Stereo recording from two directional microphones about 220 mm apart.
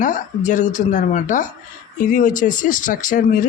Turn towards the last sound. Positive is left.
turn(degrees=35)  # may be behind; listen again after turning